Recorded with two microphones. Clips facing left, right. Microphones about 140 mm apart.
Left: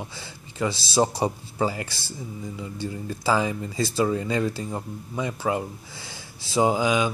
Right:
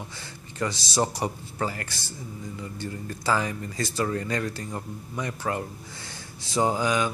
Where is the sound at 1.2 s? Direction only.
20° left (ahead or behind).